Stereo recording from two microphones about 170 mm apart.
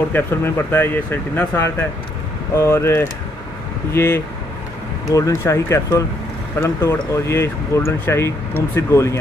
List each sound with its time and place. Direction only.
0.1 s speech: 15° left (ahead or behind)